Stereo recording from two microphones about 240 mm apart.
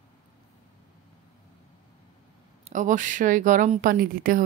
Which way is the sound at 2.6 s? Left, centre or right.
Right.